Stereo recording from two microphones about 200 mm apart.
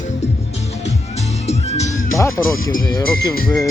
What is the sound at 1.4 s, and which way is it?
Music, 35° left (ahead or behind).